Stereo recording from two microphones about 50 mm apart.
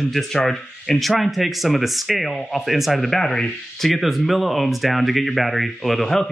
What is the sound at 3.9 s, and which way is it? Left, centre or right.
Speech, centre.